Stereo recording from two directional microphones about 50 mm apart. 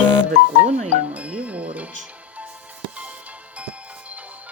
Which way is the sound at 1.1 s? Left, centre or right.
Right.